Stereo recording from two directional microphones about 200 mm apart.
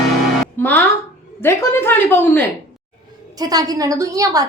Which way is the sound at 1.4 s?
10° left (ahead or behind).